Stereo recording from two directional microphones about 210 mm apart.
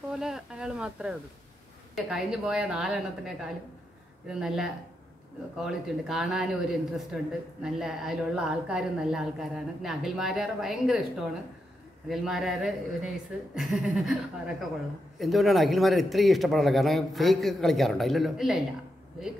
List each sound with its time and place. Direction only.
0.1 s a woman's voice: centre (ahead or behind)
15.1 s a woman's voice: centre (ahead or behind)